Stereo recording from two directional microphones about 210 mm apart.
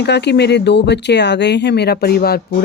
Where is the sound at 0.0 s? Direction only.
55° left (ahead or behind).